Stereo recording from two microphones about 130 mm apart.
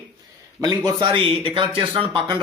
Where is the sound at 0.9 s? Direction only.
40° right (ahead or behind).